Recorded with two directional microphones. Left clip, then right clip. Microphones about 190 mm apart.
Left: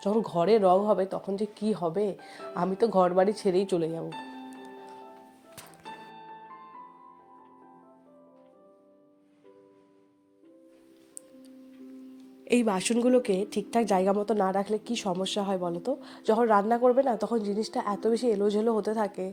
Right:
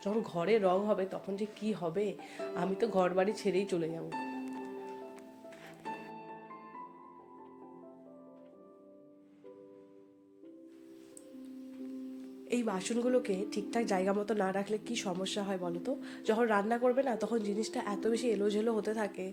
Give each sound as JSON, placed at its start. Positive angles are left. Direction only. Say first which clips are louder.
{"t": 0.0, "sound": "speech", "louder": "left 8 dB", "side_deg": 30}
{"t": 5.8, "sound": "music", "louder": "right 1 dB", "side_deg": -30}
{"t": 12.5, "sound": "speech", "louder": "left 9 dB", "side_deg": 40}